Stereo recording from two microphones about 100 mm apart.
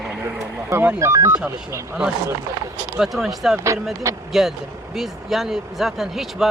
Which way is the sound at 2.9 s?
5° right (ahead or behind).